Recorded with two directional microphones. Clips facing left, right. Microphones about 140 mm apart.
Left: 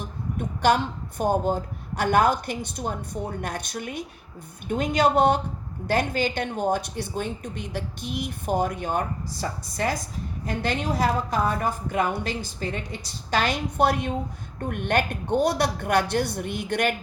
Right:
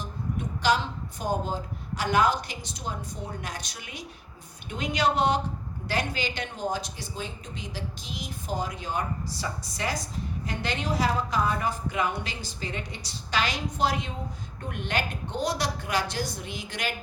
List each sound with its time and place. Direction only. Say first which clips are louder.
0.0 s a woman's voice: left 2 dB; 55° left (ahead or behind)